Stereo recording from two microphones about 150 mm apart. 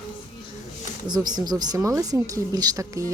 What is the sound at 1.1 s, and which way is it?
Speech, 30° right (ahead or behind).